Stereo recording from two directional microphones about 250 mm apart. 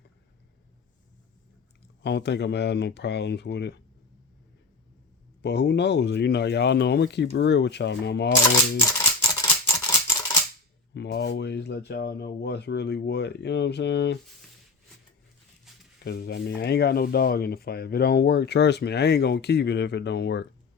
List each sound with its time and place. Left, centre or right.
2.0 s speech: left
5.4 s speech: left
9.4 s scissors: centre
10.9 s speech: left
16.0 s speech: left